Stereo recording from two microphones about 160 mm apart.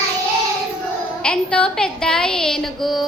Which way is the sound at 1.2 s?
5° left (ahead or behind).